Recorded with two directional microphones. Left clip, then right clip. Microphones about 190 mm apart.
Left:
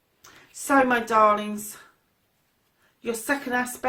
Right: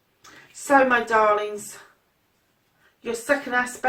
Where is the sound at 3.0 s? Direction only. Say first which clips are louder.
Right 3 dB; 45° left (ahead or behind).